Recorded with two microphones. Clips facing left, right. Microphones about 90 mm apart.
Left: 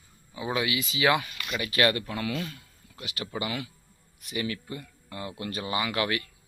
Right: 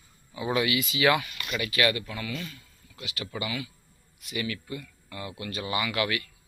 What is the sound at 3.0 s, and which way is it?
Speech, 35° left (ahead or behind).